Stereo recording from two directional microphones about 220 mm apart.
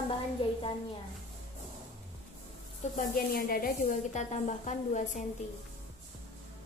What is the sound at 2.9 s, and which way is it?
A woman's voice, 40° left (ahead or behind).